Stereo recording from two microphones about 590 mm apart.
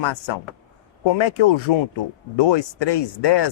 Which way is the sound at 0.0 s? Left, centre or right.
Left.